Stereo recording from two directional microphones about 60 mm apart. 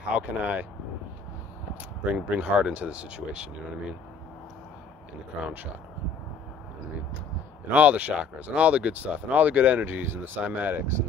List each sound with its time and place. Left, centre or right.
0.1 s speech: right
2.1 s speech: right
7.7 s speech: right
10.0 s speech: right